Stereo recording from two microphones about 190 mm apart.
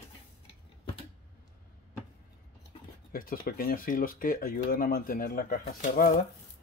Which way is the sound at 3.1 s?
50° left (ahead or behind).